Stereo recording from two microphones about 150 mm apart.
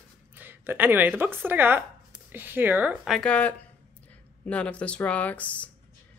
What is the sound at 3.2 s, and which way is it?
Speech, 10° left (ahead or behind).